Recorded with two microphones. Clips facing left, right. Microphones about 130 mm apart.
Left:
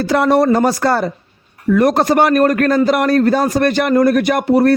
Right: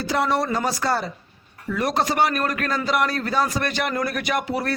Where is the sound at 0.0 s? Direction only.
55° left (ahead or behind).